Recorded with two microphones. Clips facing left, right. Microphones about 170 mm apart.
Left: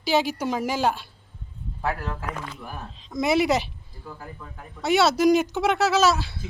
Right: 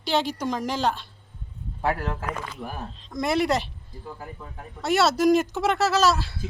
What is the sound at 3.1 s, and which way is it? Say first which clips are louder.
Speech: left 2 dB; centre (ahead or behind).